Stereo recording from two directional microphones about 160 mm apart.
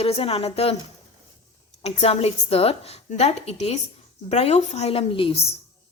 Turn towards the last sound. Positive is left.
turn(degrees=35)  # may be behind; listen again after turning